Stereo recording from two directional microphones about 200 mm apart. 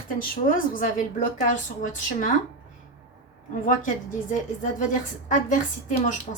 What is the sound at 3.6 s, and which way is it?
A woman's voice, 40° left (ahead or behind).